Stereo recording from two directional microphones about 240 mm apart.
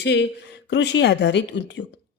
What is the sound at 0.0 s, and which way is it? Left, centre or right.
Speech, left.